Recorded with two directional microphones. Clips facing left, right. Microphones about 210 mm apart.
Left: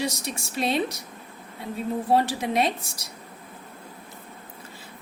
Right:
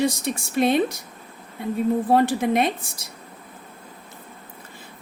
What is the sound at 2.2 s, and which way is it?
Speech, 55° right (ahead or behind).